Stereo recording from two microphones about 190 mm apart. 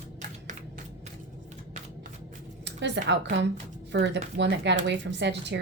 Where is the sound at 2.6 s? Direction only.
65° right (ahead or behind).